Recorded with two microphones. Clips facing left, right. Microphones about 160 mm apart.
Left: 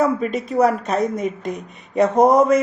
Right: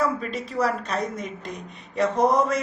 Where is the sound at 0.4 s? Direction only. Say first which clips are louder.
Left 8 dB; 50° left (ahead or behind).